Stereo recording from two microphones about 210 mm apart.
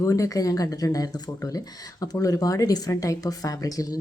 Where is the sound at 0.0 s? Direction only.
15° left (ahead or behind).